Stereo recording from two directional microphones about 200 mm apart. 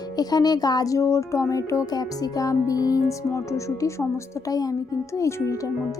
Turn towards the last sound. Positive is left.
turn(degrees=15)  # may be behind; listen again after turning